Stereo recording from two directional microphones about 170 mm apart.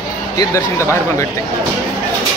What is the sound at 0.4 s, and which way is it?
Speech, 20° left (ahead or behind).